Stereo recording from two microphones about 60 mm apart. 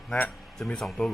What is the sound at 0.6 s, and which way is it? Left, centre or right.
Speech, centre.